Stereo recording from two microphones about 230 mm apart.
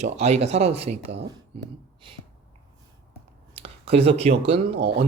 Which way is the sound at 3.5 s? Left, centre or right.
Right.